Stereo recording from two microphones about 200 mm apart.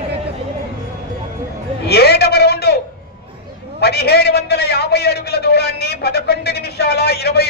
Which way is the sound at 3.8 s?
50° left (ahead or behind).